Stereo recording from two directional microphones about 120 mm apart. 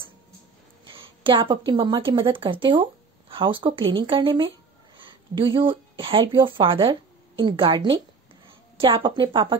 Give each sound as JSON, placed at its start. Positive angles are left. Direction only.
{"t": 0.8, "sound": "a woman's voice", "side_deg": -45}